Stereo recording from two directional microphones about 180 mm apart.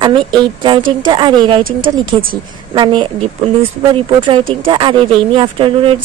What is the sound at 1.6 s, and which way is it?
Speech, 50° right (ahead or behind).